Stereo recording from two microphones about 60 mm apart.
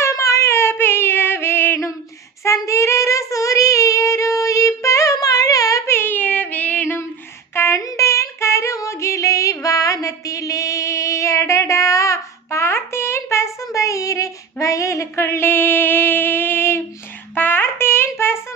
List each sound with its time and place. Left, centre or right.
0.0 s female singing: left
2.4 s child singing: left
5.9 s a sound: left
6.1 s music: left
7.7 s child singing: left
13.7 s female singing: left
17.4 s a sound: left